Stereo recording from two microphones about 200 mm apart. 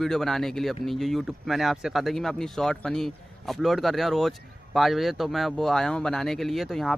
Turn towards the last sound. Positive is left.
turn(degrees=0)  # may be behind; listen again after turning